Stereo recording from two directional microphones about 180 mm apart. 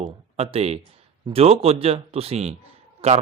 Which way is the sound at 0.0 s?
35° right (ahead or behind).